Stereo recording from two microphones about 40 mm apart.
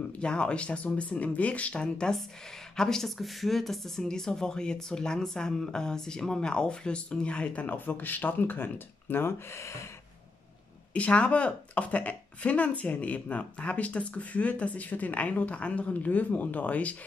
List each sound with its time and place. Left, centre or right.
0.2 s a woman's voice: left
1.8 s speech: left
3.2 s speech: centre; by 9.3 s left
10.9 s a woman's voice: left